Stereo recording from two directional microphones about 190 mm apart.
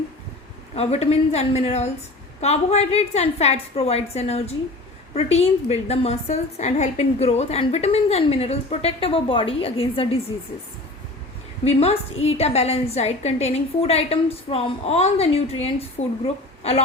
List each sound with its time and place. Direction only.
0.8 s a woman's voice: 35° left (ahead or behind)
11.6 s a woman's voice: 30° left (ahead or behind)